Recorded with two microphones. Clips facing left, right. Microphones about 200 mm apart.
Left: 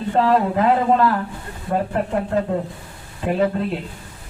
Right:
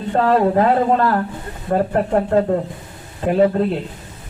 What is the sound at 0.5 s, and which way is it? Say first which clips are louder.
A man's voice: right 2 dB; 45° right (ahead or behind).